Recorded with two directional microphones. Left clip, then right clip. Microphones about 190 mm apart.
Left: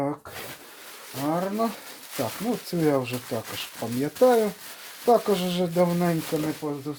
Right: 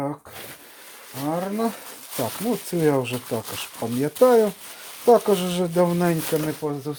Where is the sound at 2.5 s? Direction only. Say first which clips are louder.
Right 3 dB; 45° right (ahead or behind).